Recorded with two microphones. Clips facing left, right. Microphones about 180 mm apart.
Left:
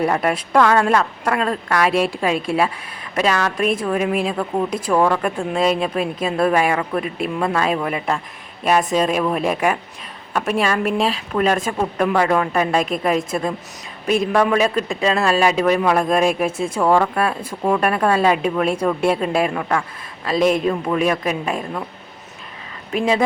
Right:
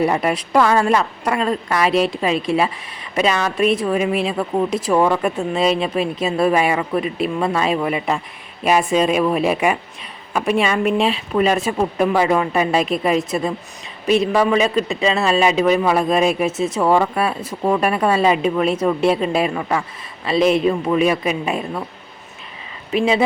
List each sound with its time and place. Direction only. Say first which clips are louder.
0.0 s speech: right 1 dB; centre (ahead or behind)
16.5 s speech: right 2 dB; 55° left (ahead or behind)
16.7 s speech: left 1 dB; 5° right (ahead or behind)